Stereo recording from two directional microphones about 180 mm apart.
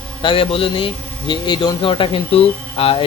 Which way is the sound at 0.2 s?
30° left (ahead or behind).